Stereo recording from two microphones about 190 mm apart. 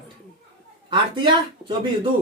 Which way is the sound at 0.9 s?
25° right (ahead or behind).